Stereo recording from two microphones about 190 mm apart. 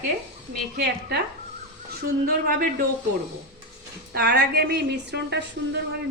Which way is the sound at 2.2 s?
50° right (ahead or behind).